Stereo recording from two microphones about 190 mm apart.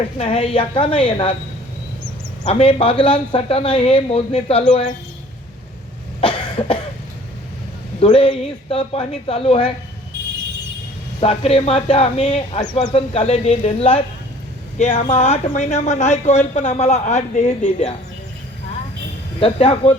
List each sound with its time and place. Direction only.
0.2 s speech: 30° left (ahead or behind)
2.4 s speech: 30° left (ahead or behind)
6.1 s cough: 30° left (ahead or behind)
8.0 s speech: 30° left (ahead or behind)
11.2 s speech: 30° left (ahead or behind)
19.4 s speech: 30° left (ahead or behind)